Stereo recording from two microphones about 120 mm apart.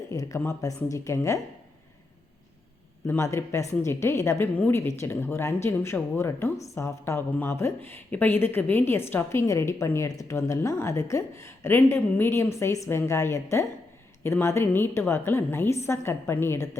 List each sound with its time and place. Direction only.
0.1 s a sound: 30° left (ahead or behind)
0.3 s speech: 20° left (ahead or behind)
3.1 s speech: 25° left (ahead or behind)